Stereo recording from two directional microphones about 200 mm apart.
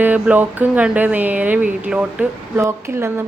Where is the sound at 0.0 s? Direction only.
10° right (ahead or behind).